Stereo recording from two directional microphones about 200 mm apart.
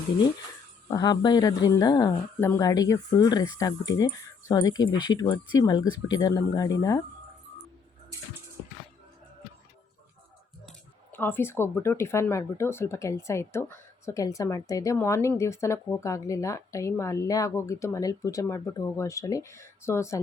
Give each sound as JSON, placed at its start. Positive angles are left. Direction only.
{"t": 0.9, "sound": "speech", "side_deg": 20}
{"t": 10.7, "sound": "speech", "side_deg": 10}